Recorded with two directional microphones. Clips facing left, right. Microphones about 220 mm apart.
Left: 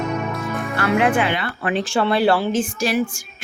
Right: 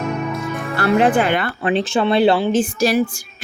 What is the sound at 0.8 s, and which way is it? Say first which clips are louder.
Speech: right 3 dB; 35° right (ahead or behind).